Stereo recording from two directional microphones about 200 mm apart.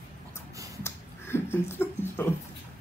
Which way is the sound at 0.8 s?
10° left (ahead or behind).